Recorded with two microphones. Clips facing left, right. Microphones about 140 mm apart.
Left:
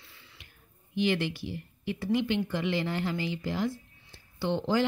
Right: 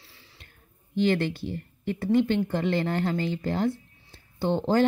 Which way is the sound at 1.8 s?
50° right (ahead or behind).